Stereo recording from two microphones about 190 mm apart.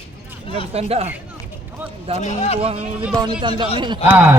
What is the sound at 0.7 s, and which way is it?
A man's voice, 30° right (ahead or behind).